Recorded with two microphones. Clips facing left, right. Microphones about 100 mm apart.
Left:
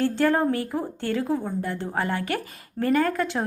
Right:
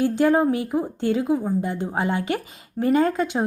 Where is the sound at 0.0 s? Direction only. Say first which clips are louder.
Right 3 dB; 15° right (ahead or behind).